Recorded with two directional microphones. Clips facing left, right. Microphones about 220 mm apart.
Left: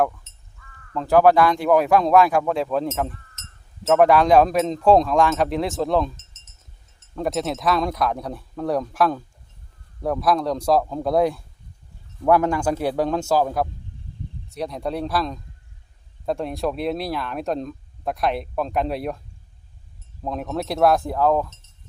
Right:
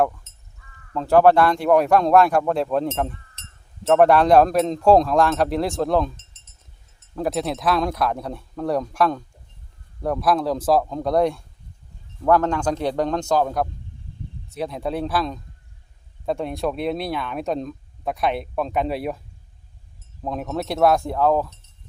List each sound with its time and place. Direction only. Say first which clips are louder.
0.9 s speech: right 1 dB; centre (ahead or behind)
3.4 s a sound: even; 30° right (ahead or behind)
3.8 s speech: right 1 dB; centre (ahead or behind)
7.2 s speech: even; centre (ahead or behind)
20.2 s speech: even; centre (ahead or behind)